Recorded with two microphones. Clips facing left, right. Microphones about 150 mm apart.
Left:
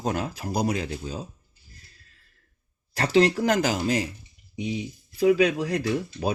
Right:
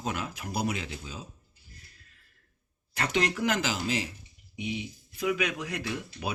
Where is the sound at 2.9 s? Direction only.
35° left (ahead or behind).